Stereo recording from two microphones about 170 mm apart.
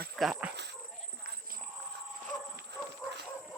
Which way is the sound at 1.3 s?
60° right (ahead or behind).